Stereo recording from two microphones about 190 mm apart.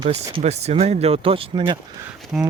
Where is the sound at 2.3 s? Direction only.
Centre (ahead or behind).